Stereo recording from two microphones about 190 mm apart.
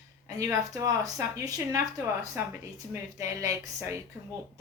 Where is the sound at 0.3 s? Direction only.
15° right (ahead or behind).